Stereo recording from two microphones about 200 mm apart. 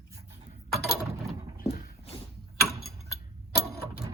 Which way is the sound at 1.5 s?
45° left (ahead or behind).